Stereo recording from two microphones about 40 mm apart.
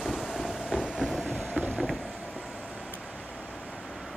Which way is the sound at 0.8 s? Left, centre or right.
Centre.